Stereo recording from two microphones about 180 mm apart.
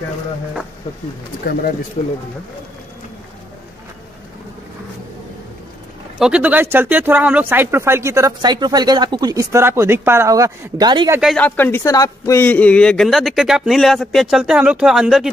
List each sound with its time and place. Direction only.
1.4 s speech: 55° left (ahead or behind)
2.0 s speech: 40° left (ahead or behind)
6.1 s speech: 5° right (ahead or behind); by 11.1 s 25° right (ahead or behind)
11.1 s a man's voice: 5° left (ahead or behind)